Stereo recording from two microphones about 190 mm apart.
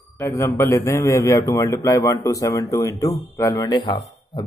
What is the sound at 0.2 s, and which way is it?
A man's voice, 15° left (ahead or behind).